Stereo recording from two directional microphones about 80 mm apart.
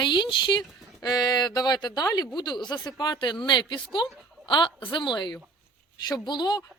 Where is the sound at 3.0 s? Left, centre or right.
Left.